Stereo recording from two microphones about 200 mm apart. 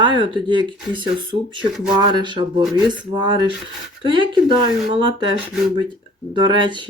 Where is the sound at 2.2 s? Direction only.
20° right (ahead or behind).